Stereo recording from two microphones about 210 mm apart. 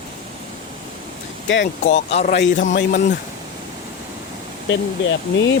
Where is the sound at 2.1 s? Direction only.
30° left (ahead or behind).